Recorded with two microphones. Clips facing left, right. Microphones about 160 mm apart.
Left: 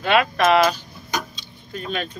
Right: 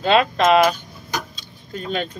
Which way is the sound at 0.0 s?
25° right (ahead or behind).